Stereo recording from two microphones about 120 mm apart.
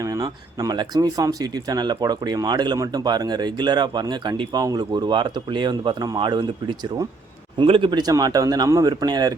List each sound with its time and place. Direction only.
0.0 s speech: 30° right (ahead or behind)